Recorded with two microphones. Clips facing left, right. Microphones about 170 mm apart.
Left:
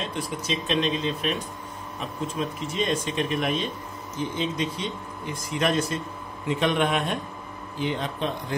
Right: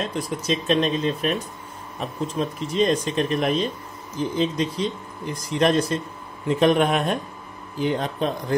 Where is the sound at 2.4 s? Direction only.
40° right (ahead or behind).